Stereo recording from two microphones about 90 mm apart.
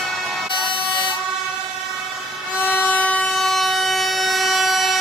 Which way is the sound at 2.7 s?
15° left (ahead or behind).